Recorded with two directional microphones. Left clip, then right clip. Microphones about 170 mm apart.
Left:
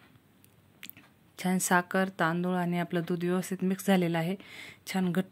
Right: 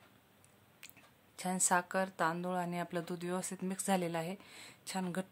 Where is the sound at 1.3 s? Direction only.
15° left (ahead or behind).